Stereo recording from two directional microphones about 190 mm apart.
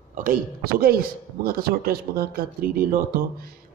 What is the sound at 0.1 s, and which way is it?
A man's voice, 50° right (ahead or behind).